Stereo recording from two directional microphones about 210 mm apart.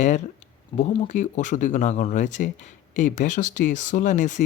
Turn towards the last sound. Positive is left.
turn(degrees=35)  # may be behind; listen again after turning